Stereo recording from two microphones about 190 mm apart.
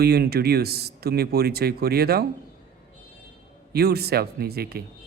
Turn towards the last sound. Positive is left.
turn(degrees=-55)  # may be behind; listen again after turning